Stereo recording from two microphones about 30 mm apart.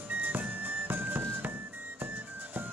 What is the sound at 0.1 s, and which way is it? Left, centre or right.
Music, right.